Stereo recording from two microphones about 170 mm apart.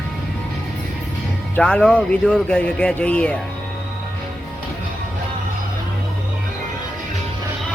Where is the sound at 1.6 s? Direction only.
5° left (ahead or behind).